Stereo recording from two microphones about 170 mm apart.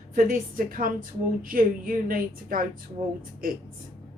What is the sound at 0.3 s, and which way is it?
A woman's voice, 55° right (ahead or behind).